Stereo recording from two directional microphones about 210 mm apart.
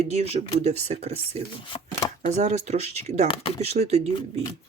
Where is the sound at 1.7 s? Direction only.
25° left (ahead or behind).